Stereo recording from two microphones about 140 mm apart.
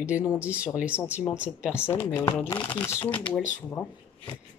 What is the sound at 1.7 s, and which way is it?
Speech, 15° left (ahead or behind).